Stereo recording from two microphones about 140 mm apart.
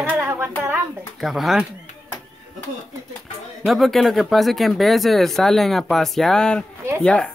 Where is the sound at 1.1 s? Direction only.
Centre (ahead or behind).